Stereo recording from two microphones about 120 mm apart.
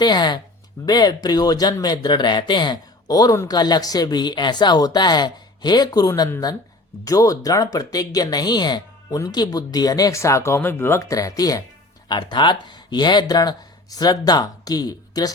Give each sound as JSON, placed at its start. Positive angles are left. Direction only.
{"t": 0.0, "sound": "speech", "side_deg": 35}